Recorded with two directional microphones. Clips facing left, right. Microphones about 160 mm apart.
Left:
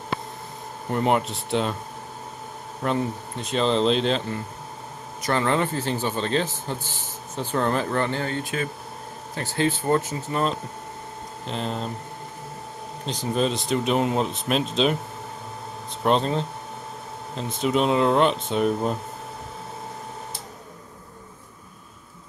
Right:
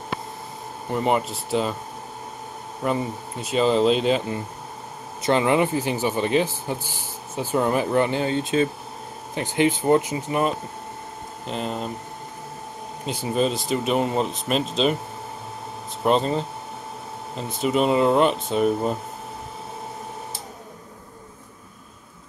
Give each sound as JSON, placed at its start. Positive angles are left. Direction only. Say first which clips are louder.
{"t": 0.8, "sound": "speech", "louder": "even", "side_deg": 0}
{"t": 2.8, "sound": "speech", "louder": "even", "side_deg": -5}
{"t": 13.0, "sound": "speech", "louder": "right 1 dB", "side_deg": -5}
{"t": 16.0, "sound": "speech", "louder": "right 1 dB", "side_deg": 0}
{"t": 17.6, "sound": "speech", "louder": "right 1 dB", "side_deg": 0}